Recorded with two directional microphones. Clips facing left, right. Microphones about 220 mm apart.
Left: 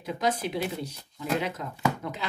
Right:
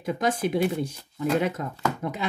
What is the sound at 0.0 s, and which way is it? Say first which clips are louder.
Speech: right 3 dB; 50° right (ahead or behind).